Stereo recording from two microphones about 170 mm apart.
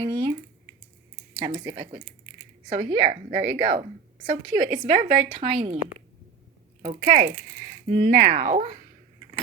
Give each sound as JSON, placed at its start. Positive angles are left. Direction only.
{"t": 0.1, "sound": "speech", "side_deg": -30}
{"t": 1.4, "sound": "a woman's voice", "side_deg": -35}
{"t": 6.8, "sound": "speech", "side_deg": -45}